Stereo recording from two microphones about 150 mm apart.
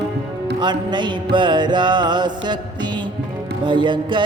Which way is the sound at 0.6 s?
30° right (ahead or behind).